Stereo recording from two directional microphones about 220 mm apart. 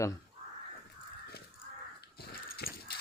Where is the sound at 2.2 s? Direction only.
45° left (ahead or behind).